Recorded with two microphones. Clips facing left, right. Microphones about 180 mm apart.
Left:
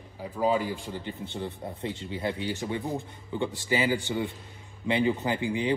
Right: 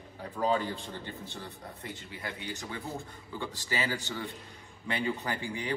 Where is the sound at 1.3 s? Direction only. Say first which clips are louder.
Left 8 dB; 25° left (ahead or behind).